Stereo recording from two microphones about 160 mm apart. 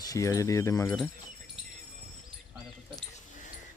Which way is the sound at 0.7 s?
5° left (ahead or behind).